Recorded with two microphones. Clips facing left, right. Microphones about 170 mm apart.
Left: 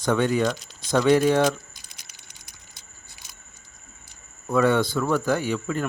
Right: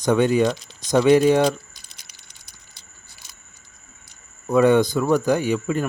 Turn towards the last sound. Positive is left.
turn(degrees=-15)  # may be behind; listen again after turning